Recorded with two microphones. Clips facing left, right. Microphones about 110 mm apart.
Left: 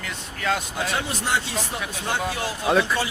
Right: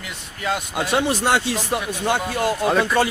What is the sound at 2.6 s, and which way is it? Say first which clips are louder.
Speech: even; centre (ahead or behind).